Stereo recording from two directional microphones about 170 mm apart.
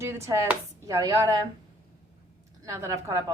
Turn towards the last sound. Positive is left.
turn(degrees=-15)  # may be behind; listen again after turning